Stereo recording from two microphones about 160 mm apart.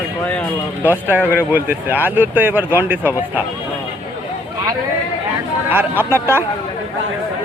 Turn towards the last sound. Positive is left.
turn(degrees=-15)  # may be behind; listen again after turning